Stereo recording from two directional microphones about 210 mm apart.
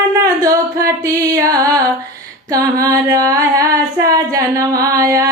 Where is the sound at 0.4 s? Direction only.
15° right (ahead or behind).